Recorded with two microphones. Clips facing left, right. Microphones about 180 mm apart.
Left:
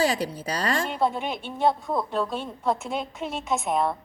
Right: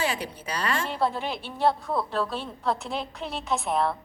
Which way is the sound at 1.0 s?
Centre (ahead or behind).